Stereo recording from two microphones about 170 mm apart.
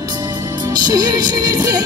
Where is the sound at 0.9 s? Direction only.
25° right (ahead or behind).